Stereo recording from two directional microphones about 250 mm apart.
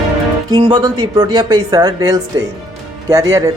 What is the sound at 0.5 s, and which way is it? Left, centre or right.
Speech, centre.